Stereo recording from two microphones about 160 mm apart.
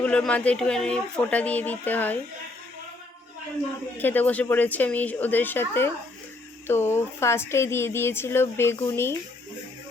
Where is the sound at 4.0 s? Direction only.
10° left (ahead or behind).